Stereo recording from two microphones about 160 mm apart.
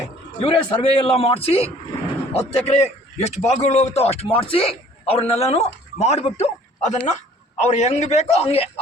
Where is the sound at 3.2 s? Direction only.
45° left (ahead or behind).